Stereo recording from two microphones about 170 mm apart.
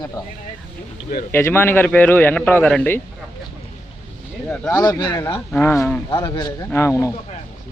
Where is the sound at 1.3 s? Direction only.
15° left (ahead or behind).